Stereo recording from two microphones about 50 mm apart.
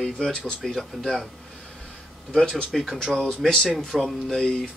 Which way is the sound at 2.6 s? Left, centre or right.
Centre.